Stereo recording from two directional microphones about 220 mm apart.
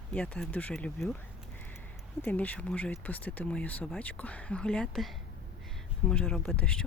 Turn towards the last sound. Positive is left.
turn(degrees=5)  # may be behind; listen again after turning